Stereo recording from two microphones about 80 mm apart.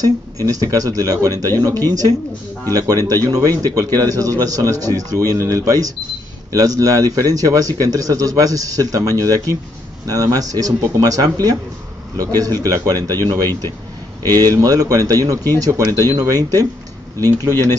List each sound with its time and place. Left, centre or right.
0.0 s speech: right